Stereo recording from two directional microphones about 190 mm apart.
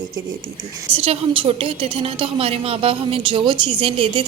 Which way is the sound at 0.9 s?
30° right (ahead or behind).